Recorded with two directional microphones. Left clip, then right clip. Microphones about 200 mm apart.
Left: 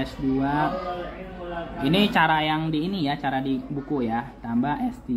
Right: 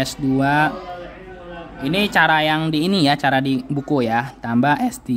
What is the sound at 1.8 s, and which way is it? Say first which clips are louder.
Speech: right 4 dB; 15° right (ahead or behind).